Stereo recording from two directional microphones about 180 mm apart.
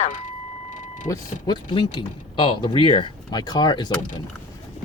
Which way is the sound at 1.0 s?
20° left (ahead or behind).